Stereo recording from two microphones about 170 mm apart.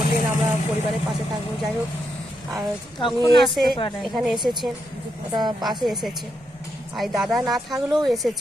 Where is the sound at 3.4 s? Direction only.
Centre (ahead or behind).